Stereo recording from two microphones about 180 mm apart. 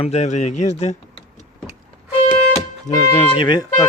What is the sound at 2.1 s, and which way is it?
Music, 35° left (ahead or behind).